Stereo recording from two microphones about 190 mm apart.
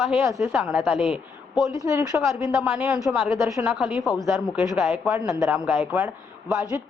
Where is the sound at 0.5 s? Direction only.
5° right (ahead or behind).